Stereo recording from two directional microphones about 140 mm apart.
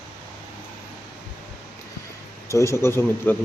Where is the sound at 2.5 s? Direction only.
20° left (ahead or behind).